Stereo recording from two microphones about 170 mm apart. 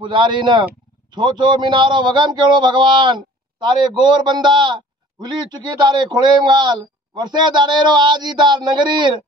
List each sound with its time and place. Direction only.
0.0 s a man's voice: 30° right (ahead or behind)